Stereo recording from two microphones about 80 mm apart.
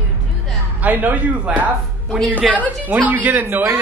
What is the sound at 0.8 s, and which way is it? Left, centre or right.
Speech, right.